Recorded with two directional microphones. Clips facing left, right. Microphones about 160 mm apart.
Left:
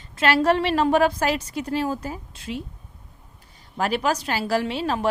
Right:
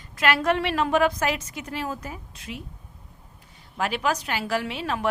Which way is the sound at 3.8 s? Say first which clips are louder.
Left 3 dB; 40° left (ahead or behind).